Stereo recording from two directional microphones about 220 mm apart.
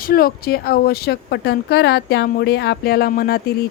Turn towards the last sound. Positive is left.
turn(degrees=45)  # may be behind; listen again after turning